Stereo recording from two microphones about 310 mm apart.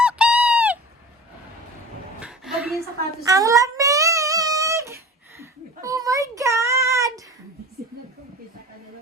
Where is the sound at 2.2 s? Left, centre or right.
Centre.